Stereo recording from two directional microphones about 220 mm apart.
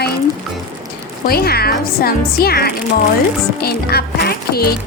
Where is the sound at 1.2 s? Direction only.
45° left (ahead or behind).